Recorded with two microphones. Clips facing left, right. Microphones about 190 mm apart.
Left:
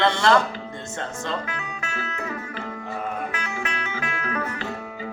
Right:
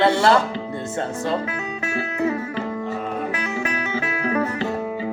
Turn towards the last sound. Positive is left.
turn(degrees=-30)  # may be behind; listen again after turning